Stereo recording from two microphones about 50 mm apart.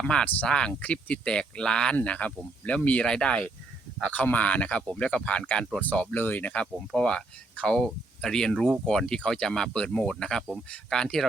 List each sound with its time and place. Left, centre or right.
0.0 s speech: centre
0.8 s speech: left
4.0 s speech: left; by 11.3 s centre